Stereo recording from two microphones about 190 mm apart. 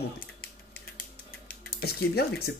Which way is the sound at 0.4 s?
55° left (ahead or behind).